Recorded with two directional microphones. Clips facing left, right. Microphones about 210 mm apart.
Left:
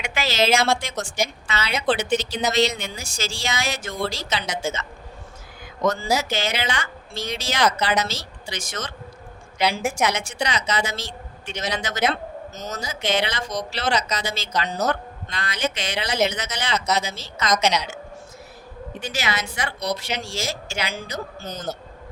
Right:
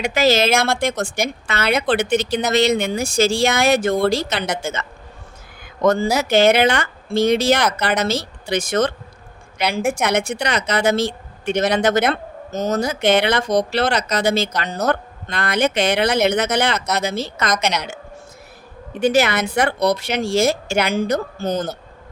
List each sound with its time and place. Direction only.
0.0 s a woman's voice: 40° right (ahead or behind); by 21.7 s 55° right (ahead or behind)